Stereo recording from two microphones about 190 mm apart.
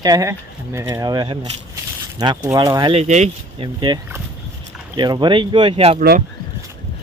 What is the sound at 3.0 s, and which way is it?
Speech, 35° right (ahead or behind).